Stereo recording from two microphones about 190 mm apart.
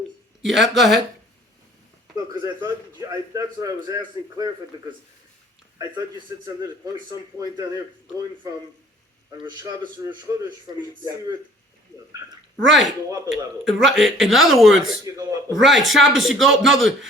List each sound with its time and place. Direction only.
0.4 s speech: centre (ahead or behind)
2.1 s a man's voice: 20° right (ahead or behind)
13.1 s a man's voice: 15° right (ahead or behind)
13.3 s speech: 5° right (ahead or behind)
15.0 s a man's voice: 15° right (ahead or behind)
15.5 s speech: centre (ahead or behind)